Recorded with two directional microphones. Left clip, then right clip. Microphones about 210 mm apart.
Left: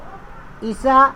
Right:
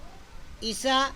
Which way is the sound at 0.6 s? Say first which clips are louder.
Left 12 dB; 35° right (ahead or behind).